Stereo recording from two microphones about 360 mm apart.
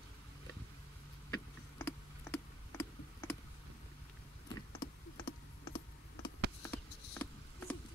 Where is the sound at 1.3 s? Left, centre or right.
Centre.